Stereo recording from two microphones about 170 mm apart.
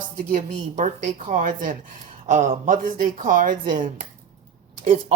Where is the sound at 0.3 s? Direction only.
50° right (ahead or behind).